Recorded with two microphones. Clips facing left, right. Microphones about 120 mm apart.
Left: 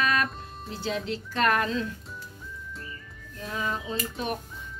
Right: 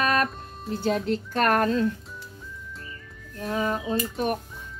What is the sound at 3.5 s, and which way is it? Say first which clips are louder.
Speech: right 5 dB; 45° right (ahead or behind).